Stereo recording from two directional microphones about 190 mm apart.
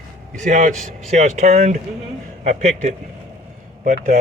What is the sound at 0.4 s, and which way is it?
Speech, 40° right (ahead or behind).